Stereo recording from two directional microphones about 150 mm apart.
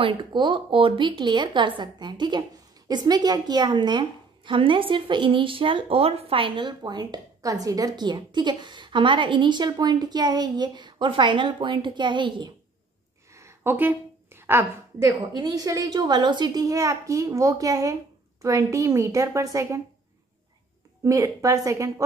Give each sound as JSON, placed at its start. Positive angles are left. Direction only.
{"t": 0.0, "sound": "a woman's voice", "side_deg": -30}
{"t": 13.3, "sound": "a woman's voice", "side_deg": -20}
{"t": 21.0, "sound": "a woman's voice", "side_deg": -20}